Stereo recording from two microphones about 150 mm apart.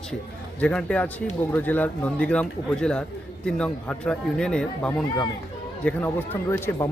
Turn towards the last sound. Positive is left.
turn(degrees=15)  # may be behind; listen again after turning